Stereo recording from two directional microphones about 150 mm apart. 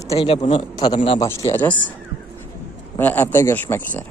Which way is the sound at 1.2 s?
20° left (ahead or behind).